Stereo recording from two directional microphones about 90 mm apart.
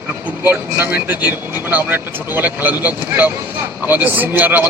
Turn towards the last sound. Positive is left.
turn(degrees=-20)  # may be behind; listen again after turning